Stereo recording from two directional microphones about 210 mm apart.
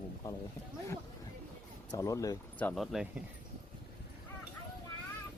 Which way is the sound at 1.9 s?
15° left (ahead or behind).